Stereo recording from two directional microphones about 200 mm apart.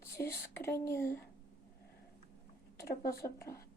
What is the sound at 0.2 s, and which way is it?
Whispering, 10° left (ahead or behind).